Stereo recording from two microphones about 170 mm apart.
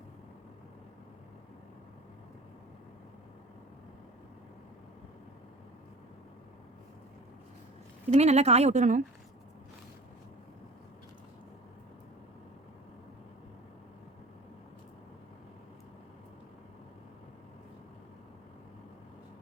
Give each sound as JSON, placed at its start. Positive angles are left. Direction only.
{"t": 8.1, "sound": "a woman's voice", "side_deg": -40}